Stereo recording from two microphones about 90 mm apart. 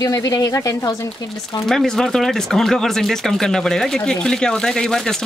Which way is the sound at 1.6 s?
5° left (ahead or behind).